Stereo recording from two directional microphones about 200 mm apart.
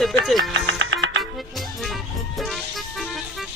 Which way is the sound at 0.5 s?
70° right (ahead or behind).